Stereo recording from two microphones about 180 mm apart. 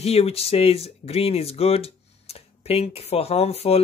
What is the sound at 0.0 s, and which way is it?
Speech, 35° left (ahead or behind).